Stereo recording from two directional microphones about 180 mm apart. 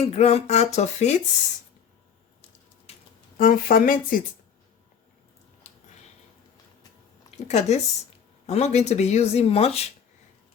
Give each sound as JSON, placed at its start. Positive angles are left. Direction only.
{"t": 0.0, "sound": "speech", "side_deg": 35}
{"t": 2.9, "sound": "a sound", "side_deg": 35}
{"t": 3.3, "sound": "speech", "side_deg": 50}
{"t": 7.3, "sound": "speech", "side_deg": 35}